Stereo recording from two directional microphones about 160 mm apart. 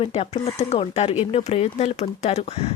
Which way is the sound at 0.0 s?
40° left (ahead or behind).